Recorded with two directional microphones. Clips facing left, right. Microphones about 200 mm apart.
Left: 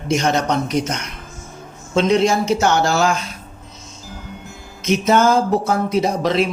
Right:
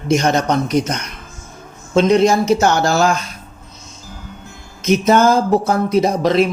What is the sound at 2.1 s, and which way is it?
Speech, 40° right (ahead or behind).